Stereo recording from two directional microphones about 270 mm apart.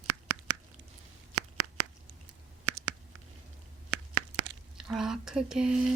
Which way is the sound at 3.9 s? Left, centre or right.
Right.